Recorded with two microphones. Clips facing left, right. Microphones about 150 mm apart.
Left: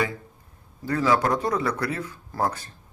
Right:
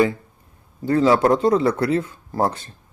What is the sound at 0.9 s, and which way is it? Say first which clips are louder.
Speech: right 6 dB; 25° right (ahead or behind).